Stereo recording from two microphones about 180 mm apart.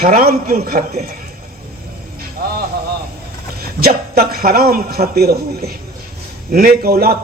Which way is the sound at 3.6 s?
60° right (ahead or behind).